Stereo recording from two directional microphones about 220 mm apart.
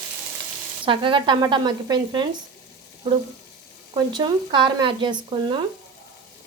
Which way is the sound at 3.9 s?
20° right (ahead or behind).